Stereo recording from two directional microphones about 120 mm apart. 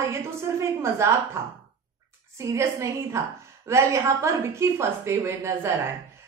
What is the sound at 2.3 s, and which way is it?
A woman's voice, 25° right (ahead or behind).